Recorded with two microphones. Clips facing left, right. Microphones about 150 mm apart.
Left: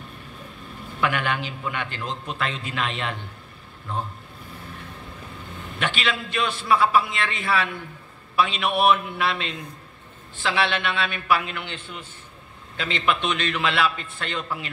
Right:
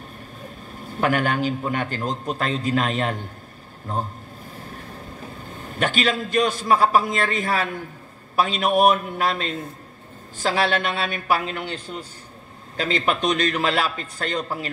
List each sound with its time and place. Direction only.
1.0 s a man's voice: 40° right (ahead or behind)
5.6 s a man's voice: 40° right (ahead or behind)